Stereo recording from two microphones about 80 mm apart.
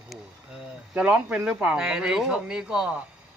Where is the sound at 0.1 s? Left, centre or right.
Centre.